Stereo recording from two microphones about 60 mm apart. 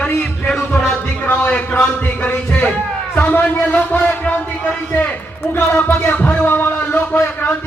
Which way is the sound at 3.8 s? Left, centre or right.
Centre.